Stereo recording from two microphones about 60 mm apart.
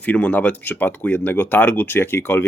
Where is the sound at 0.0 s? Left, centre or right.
Left.